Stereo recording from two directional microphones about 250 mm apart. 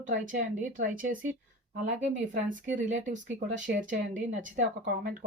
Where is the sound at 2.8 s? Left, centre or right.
Right.